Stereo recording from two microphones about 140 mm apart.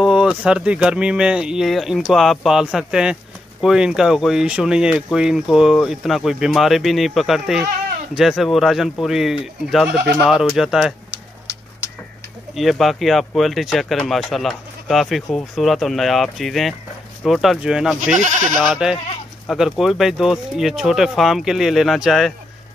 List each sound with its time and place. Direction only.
0.0 s speech: 5° right (ahead or behind)
12.5 s speech: centre (ahead or behind)
18.1 s speech: 60° right (ahead or behind)
18.6 s speech: 5° right (ahead or behind)